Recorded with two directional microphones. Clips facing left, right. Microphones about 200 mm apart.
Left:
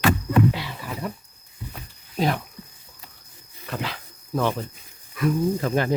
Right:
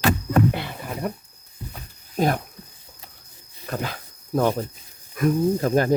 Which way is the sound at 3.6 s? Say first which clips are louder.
Right 2 dB; 45° right (ahead or behind).